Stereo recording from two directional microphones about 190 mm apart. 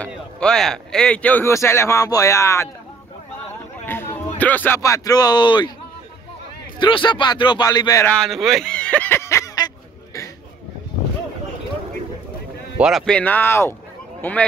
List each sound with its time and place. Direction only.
0.0 s a man's voice: 5° left (ahead or behind)
3.8 s a man's voice: 10° left (ahead or behind)
6.8 s speech: 25° left (ahead or behind)
8.1 s a sound: centre (ahead or behind)
12.7 s a man's voice: centre (ahead or behind)